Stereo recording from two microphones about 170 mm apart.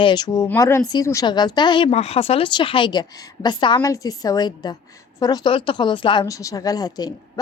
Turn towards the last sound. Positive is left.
turn(degrees=20)  # may be behind; listen again after turning